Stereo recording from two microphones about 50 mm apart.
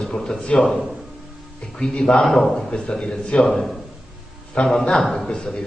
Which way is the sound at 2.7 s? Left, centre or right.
Centre.